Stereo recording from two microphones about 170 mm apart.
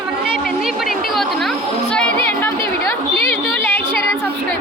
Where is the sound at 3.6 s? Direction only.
15° left (ahead or behind).